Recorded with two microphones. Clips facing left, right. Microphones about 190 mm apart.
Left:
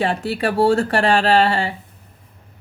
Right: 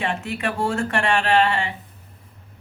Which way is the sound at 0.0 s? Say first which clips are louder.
Left 5 dB; 35° left (ahead or behind).